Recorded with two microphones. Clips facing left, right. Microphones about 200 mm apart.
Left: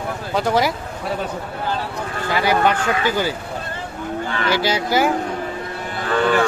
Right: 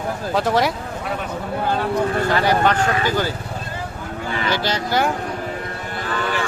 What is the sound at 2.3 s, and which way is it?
Speech, 10° left (ahead or behind).